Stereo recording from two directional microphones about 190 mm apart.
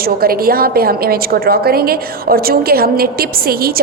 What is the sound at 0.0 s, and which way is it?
A woman's voice, 50° right (ahead or behind).